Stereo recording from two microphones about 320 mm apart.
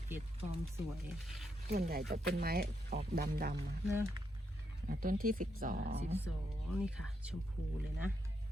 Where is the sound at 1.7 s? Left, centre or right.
Right.